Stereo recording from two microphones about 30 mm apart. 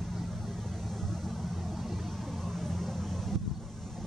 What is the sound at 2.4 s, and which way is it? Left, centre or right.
Vehicle, centre.